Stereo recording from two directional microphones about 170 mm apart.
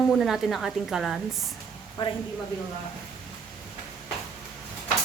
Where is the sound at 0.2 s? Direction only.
Centre (ahead or behind).